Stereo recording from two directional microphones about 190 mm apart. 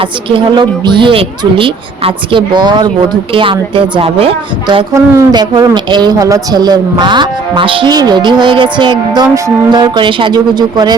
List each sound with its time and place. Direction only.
0.0 s a woman's voice: 25° right (ahead or behind)